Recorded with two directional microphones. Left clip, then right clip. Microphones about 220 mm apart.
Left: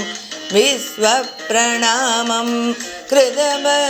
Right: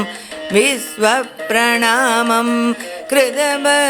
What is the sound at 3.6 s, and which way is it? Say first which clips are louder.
Carnatic music: right 3 dB; 25° right (ahead or behind).